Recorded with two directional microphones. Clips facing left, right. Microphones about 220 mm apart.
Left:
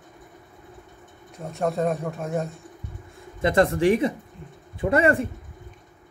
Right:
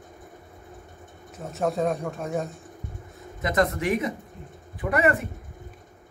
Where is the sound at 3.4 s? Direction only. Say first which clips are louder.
Left 4 dB; 30° left (ahead or behind).